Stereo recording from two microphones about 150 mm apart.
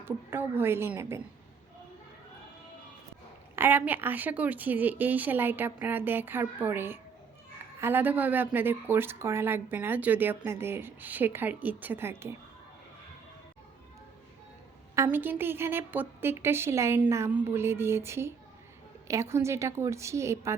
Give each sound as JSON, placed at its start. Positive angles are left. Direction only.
{"t": 0.0, "sound": "a woman's voice", "side_deg": -15}
{"t": 3.5, "sound": "a woman's voice", "side_deg": -15}
{"t": 14.9, "sound": "a woman's voice", "side_deg": -15}